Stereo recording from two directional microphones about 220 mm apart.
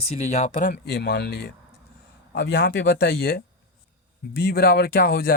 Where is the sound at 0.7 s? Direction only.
50° left (ahead or behind).